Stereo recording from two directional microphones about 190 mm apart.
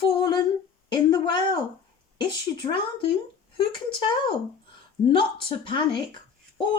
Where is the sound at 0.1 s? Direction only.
25° left (ahead or behind).